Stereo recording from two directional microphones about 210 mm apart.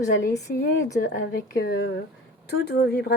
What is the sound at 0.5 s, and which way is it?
A woman's voice, 45° left (ahead or behind).